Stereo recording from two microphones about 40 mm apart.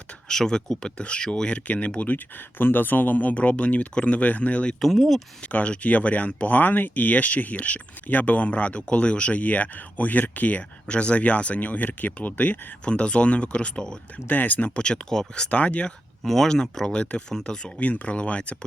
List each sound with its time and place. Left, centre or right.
0.3 s speech: centre
0.9 s speech: left
2.0 s speech: left
4.8 s speech: centre
5.5 s speech: left
9.4 s speech: left
10.8 s speech: left
12.8 s speech: left
14.3 s speech: left
14.8 s speech: left
15.4 s speech: left
16.2 s speech: centre
16.9 s speech: left
17.7 s speech: left